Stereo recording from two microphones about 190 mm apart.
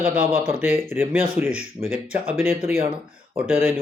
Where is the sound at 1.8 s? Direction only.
25° right (ahead or behind).